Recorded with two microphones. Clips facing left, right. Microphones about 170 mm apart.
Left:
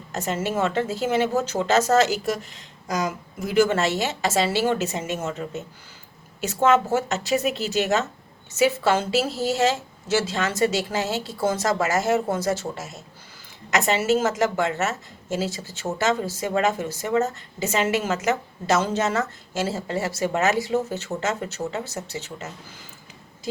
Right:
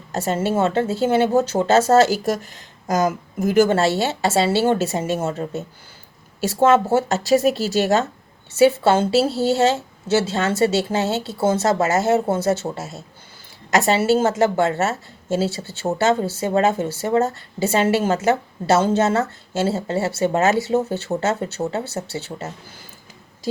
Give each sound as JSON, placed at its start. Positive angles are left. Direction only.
{"t": 0.1, "sound": "a woman's voice", "side_deg": -30}